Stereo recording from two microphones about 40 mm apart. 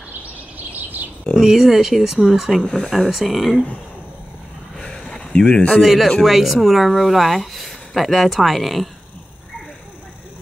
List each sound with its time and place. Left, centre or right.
1.3 s speech: centre
2.6 s speech: centre
3.1 s speech: centre
4.7 s a sound: centre
5.8 s speech: centre